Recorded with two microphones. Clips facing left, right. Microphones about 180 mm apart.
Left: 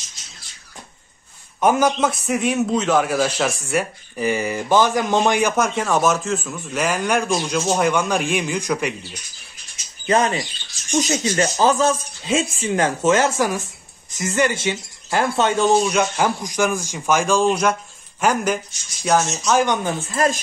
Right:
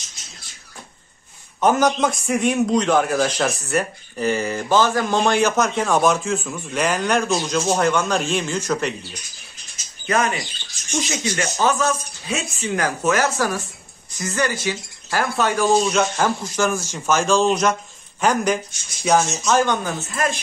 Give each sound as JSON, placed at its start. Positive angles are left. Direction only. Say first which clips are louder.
{"t": 1.6, "sound": "a man's voice", "louder": "even", "side_deg": 10}
{"t": 10.0, "sound": "speech", "louder": "left 3 dB", "side_deg": 30}
{"t": 15.8, "sound": "a man's voice", "louder": "even", "side_deg": 10}
{"t": 19.5, "sound": "speech", "louder": "left 1 dB", "side_deg": 15}